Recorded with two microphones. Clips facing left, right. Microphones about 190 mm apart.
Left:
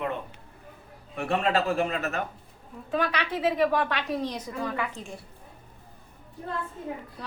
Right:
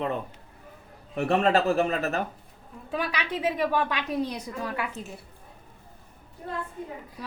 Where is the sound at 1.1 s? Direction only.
40° right (ahead or behind).